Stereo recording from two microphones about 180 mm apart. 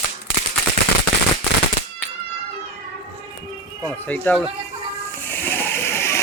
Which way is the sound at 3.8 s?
5° left (ahead or behind).